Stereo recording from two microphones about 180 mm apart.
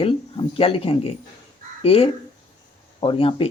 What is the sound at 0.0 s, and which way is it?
Speech, 30° left (ahead or behind).